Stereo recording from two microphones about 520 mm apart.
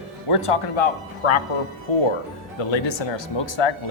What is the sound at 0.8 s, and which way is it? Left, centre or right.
Speech, left.